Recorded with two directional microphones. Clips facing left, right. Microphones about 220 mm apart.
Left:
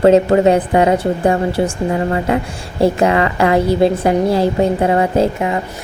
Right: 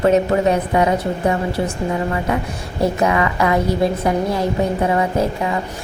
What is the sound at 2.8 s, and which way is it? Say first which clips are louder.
A woman's voice: left 4 dB; 30° left (ahead or behind).